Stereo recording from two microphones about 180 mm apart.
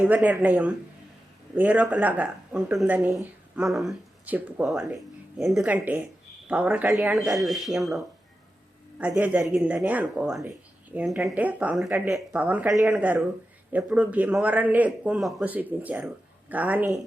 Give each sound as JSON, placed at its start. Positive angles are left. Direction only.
{"t": 0.1, "sound": "speech", "side_deg": -10}